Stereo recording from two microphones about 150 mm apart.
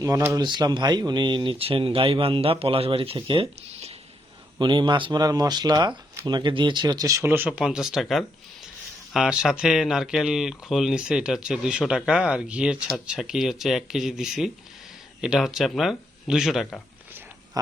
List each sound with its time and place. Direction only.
0.0 s speech: 25° right (ahead or behind); by 3.9 s 40° right (ahead or behind)
4.6 s speech: 30° right (ahead or behind); by 16.8 s centre (ahead or behind)